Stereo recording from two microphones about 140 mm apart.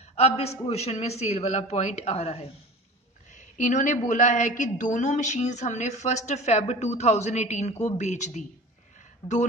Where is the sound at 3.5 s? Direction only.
65° left (ahead or behind).